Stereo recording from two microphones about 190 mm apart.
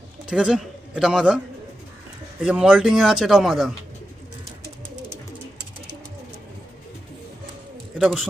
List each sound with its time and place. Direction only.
0.3 s a man's voice: 5° right (ahead or behind)
2.4 s speech: 5° right (ahead or behind)
7.9 s speech: 5° right (ahead or behind)